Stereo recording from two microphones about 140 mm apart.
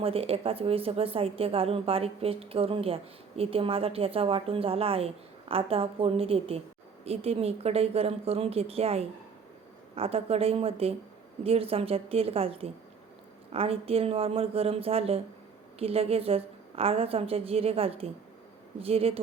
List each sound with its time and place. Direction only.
0.0 s a woman's voice: 45° right (ahead or behind)